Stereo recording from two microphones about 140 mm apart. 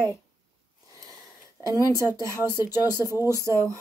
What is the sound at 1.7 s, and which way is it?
Speech, 25° right (ahead or behind).